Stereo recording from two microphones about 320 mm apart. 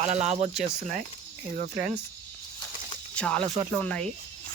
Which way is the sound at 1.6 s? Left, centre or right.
Right.